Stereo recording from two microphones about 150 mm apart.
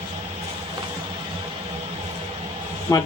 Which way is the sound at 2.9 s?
20° left (ahead or behind).